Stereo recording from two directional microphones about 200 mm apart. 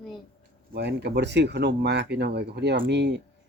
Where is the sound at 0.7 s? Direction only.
55° right (ahead or behind).